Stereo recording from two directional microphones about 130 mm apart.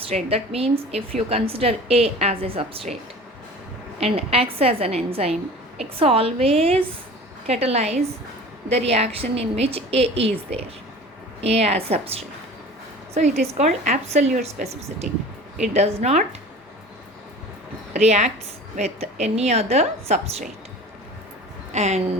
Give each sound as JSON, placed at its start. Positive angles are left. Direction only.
{"t": 0.0, "sound": "a woman's voice", "side_deg": -50}
{"t": 4.0, "sound": "a woman's voice", "side_deg": -50}
{"t": 15.5, "sound": "a woman's voice", "side_deg": -65}
{"t": 17.9, "sound": "a woman's voice", "side_deg": -60}
{"t": 21.7, "sound": "a woman's voice", "side_deg": -60}